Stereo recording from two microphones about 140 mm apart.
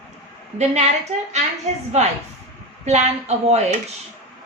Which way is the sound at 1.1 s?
50° right (ahead or behind).